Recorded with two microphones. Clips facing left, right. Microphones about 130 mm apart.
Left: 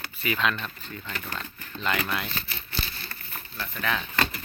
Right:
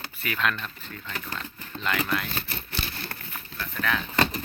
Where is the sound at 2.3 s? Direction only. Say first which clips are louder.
Right 2 dB; 50° right (ahead or behind).